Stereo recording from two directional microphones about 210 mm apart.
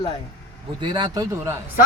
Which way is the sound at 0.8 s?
20° right (ahead or behind).